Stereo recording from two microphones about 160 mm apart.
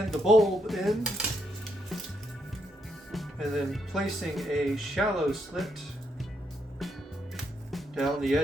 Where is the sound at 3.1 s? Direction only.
Centre (ahead or behind).